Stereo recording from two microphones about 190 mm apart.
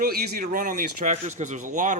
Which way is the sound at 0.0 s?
50° right (ahead or behind).